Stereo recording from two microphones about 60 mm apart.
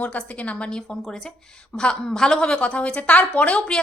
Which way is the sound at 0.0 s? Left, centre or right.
Left.